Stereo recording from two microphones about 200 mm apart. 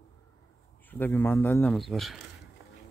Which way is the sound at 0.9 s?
10° left (ahead or behind).